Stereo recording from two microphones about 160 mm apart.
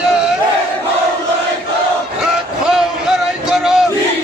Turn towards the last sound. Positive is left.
turn(degrees=-5)  # may be behind; listen again after turning